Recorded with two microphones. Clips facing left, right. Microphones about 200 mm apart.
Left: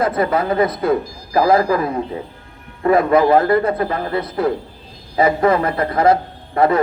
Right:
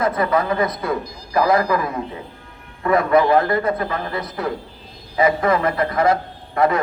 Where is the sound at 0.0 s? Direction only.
30° left (ahead or behind).